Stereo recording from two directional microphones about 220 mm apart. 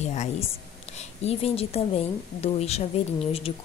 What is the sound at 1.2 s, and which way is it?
A woman's voice, 25° left (ahead or behind).